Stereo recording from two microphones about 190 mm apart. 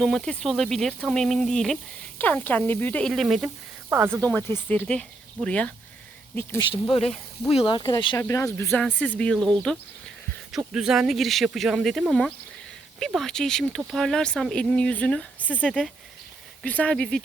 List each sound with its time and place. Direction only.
0.0 s speech: centre (ahead or behind)
4.7 s speech: 5° left (ahead or behind)
6.6 s speech: 25° left (ahead or behind); by 17.2 s 5° left (ahead or behind)